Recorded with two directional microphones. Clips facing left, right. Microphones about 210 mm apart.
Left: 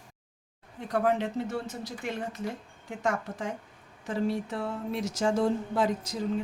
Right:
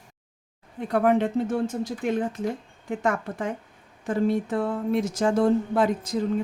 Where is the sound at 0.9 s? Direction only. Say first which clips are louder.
Right 6 dB; 60° right (ahead or behind).